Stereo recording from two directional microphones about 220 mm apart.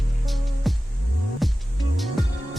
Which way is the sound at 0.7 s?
Centre (ahead or behind).